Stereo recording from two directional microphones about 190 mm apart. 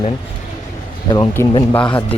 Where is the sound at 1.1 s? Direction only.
20° left (ahead or behind).